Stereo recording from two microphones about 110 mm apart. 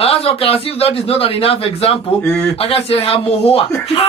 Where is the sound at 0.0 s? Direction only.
60° left (ahead or behind).